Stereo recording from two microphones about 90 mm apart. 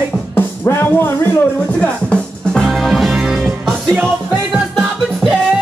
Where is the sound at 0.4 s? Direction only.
25° left (ahead or behind).